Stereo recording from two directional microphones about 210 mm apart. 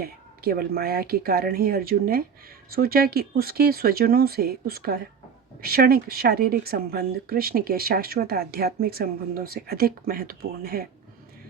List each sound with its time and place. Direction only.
0.0 s speech: 45° right (ahead or behind)